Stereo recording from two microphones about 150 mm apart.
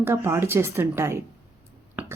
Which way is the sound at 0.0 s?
15° right (ahead or behind).